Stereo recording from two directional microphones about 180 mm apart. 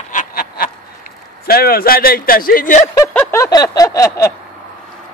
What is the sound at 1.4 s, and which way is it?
Speech, 55° left (ahead or behind).